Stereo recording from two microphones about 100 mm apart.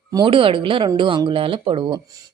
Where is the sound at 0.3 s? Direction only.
60° right (ahead or behind).